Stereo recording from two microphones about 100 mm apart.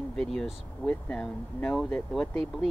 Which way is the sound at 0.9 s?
15° left (ahead or behind).